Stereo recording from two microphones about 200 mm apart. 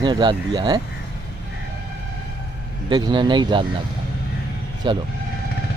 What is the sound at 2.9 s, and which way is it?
Speech, 20° right (ahead or behind).